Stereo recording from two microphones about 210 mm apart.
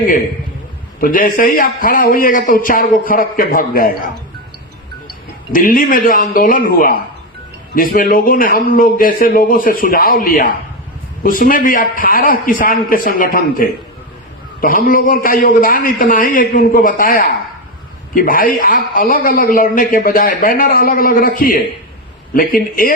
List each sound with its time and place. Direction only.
0.9 s a man's voice: 40° left (ahead or behind)
5.5 s a man's voice: 40° left (ahead or behind)